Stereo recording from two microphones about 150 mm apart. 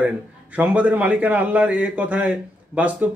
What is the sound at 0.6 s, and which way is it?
A man's voice, 10° right (ahead or behind).